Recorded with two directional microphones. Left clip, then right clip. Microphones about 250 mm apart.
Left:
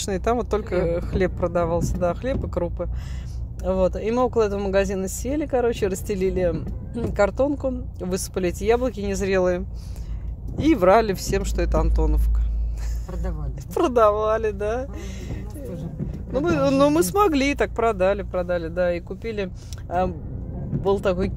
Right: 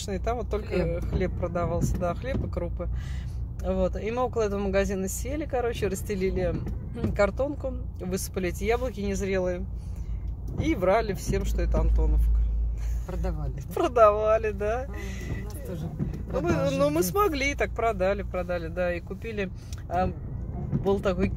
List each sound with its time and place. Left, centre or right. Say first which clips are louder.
0.0 s speech: left 7 dB; left
10.6 s speech: left 8 dB; left
13.7 s speech: left 2 dB; left
16.3 s speech: left 6 dB; left